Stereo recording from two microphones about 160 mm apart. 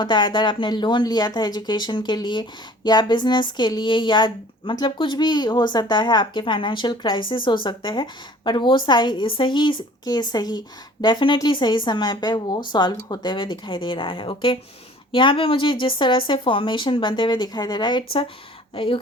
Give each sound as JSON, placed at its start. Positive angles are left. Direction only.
{"t": 0.0, "sound": "a woman's voice", "side_deg": 30}